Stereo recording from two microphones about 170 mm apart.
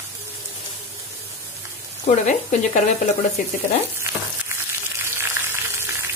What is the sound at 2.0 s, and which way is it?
Speech, 45° left (ahead or behind).